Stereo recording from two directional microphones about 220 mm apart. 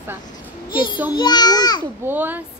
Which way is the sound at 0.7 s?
20° left (ahead or behind).